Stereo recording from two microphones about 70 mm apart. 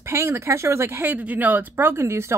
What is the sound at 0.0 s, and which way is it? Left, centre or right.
Speech, right.